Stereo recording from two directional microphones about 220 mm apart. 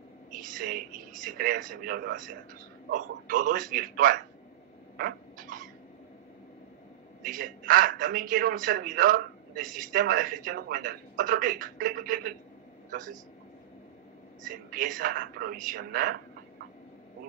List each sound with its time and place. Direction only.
0.3 s speech: 40° right (ahead or behind)
3.3 s a man's voice: 40° right (ahead or behind)
4.9 s rodents: 40° right (ahead or behind)
7.2 s a man's voice: 40° right (ahead or behind)
14.5 s a man's voice: 40° right (ahead or behind)